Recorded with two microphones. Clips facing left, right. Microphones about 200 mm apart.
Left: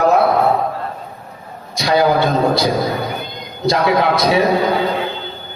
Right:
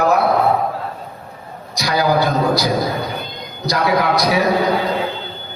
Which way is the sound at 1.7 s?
25° left (ahead or behind).